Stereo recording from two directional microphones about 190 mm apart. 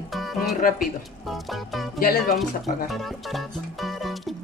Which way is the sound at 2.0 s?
50° left (ahead or behind).